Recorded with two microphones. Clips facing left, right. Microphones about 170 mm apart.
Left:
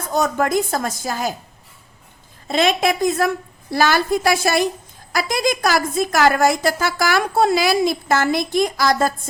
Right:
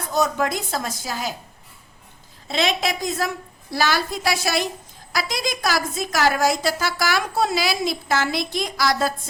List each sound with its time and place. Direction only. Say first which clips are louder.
0.1 s a woman's voice: left 3 dB; 50° left (ahead or behind)
2.5 s a woman's voice: left 5 dB; 50° left (ahead or behind)